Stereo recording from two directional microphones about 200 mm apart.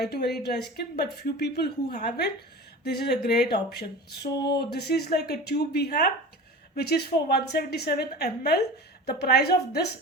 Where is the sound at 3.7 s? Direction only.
55° left (ahead or behind).